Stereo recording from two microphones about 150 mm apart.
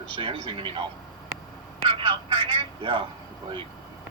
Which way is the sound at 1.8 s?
35° right (ahead or behind).